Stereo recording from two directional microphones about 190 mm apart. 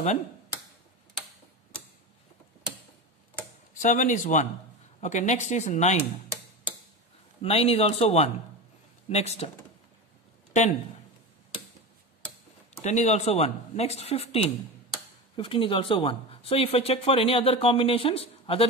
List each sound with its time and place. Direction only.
3.8 s speech: 40° left (ahead or behind)
7.4 s speech: 30° left (ahead or behind)
12.8 s speech: 35° left (ahead or behind)